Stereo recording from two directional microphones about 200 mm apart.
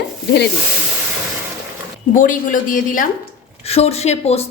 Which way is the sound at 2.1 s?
40° left (ahead or behind).